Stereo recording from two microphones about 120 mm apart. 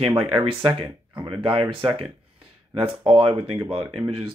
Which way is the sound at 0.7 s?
40° right (ahead or behind).